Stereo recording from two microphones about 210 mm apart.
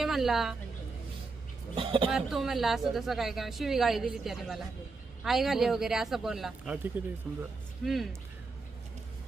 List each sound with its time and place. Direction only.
0.0 s a woman's voice: centre (ahead or behind)
1.7 s speech: 25° right (ahead or behind)
2.0 s speech: centre (ahead or behind)